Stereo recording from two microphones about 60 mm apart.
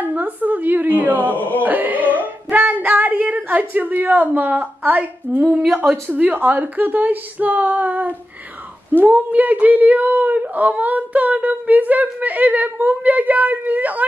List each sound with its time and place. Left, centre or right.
0.0 s a woman's voice: right